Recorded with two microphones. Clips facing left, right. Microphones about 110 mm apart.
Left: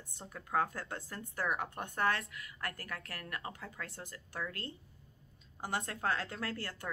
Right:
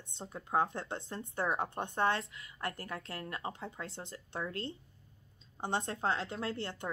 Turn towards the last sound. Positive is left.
turn(degrees=-25)  # may be behind; listen again after turning